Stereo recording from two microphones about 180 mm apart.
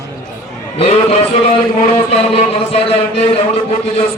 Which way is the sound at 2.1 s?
35° left (ahead or behind).